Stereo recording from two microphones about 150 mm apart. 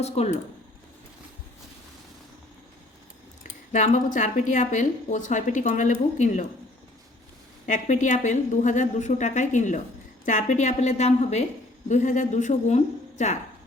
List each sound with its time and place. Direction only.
0.0 s speech: 45° left (ahead or behind)
3.4 s speech: 50° left (ahead or behind)
7.7 s speech: 55° left (ahead or behind)